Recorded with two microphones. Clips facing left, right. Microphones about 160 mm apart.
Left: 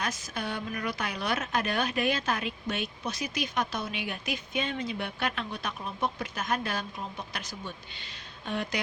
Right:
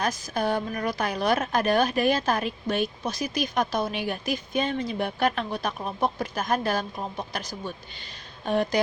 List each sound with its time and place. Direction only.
0.0 s speech: 40° right (ahead or behind)